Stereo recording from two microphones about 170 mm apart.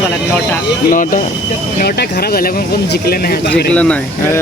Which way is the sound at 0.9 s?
50° left (ahead or behind).